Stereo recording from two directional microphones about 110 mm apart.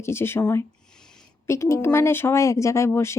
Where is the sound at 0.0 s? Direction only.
20° left (ahead or behind).